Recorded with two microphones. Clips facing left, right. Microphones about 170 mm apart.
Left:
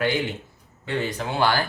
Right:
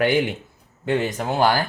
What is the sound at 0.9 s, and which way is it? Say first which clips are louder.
Speech: right 5 dB; 45° right (ahead or behind).